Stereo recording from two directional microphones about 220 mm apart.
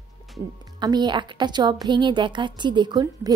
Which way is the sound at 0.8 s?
20° right (ahead or behind).